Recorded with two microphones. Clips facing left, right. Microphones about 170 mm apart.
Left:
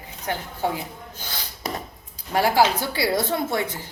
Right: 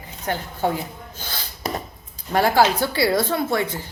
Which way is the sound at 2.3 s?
10° left (ahead or behind).